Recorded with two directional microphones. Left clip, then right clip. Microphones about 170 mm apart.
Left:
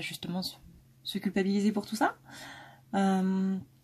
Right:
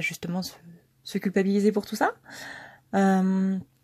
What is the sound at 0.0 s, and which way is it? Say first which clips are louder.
A woman's voice: right 6 dB; 40° right (ahead or behind).